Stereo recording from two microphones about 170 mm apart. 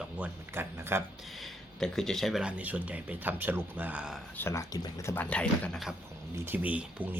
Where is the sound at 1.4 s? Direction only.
Centre (ahead or behind).